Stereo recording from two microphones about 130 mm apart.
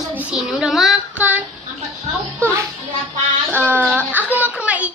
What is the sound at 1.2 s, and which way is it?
Child singing, 10° right (ahead or behind).